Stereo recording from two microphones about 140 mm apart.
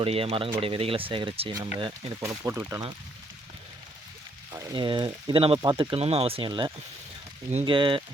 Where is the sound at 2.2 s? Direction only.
20° right (ahead or behind).